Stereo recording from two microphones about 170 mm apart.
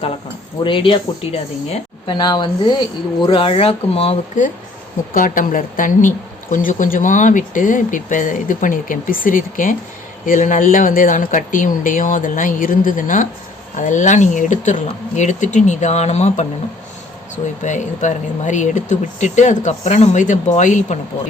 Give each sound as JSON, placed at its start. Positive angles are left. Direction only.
{"t": 0.6, "sound": "speech", "side_deg": 30}
{"t": 5.1, "sound": "a woman's voice", "side_deg": 50}
{"t": 17.6, "sound": "a woman's voice", "side_deg": 45}